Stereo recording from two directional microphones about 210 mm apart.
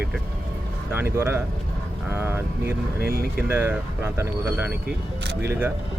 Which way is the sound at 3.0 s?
45° right (ahead or behind).